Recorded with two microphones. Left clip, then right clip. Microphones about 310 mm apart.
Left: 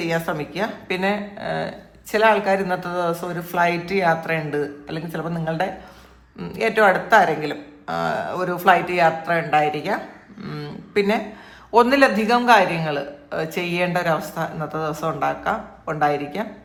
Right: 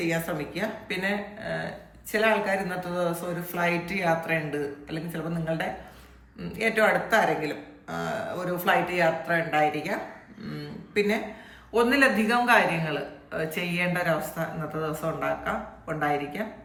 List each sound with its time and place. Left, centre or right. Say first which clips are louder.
0.1 s a man's voice: left 6 dB; centre